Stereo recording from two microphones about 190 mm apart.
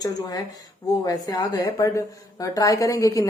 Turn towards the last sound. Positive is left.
turn(degrees=15)  # may be behind; listen again after turning